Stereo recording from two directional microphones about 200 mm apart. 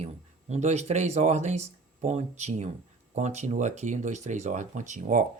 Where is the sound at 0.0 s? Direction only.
35° right (ahead or behind).